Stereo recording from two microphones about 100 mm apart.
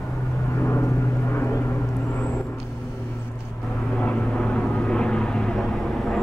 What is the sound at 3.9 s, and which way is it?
Vehicle, 10° left (ahead or behind).